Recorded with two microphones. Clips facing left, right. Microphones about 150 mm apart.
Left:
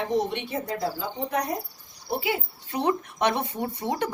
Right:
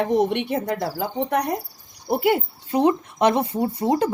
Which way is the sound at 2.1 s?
55° right (ahead or behind).